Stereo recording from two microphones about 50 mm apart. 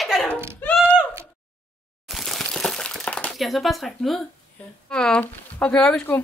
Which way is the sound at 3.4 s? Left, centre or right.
Centre.